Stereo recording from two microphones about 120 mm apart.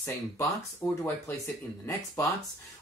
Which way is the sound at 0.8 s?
15° left (ahead or behind).